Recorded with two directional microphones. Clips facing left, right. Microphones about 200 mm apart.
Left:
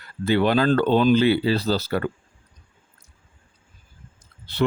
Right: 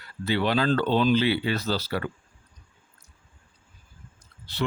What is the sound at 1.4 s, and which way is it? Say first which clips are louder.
Speech: left 5 dB; 35° left (ahead or behind).